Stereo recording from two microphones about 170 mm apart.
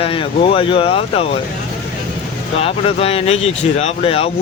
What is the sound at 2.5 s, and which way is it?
Speech, 35° left (ahead or behind).